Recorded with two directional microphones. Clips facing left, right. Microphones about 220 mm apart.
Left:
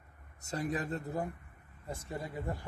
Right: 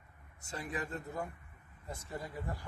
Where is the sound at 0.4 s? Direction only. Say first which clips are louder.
Left 5 dB; 40° left (ahead or behind).